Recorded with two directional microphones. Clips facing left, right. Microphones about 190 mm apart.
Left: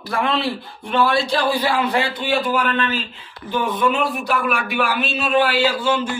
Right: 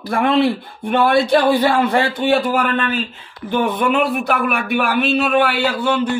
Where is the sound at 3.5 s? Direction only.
60° right (ahead or behind).